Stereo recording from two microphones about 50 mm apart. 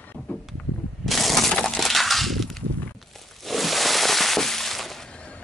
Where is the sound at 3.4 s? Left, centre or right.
Centre.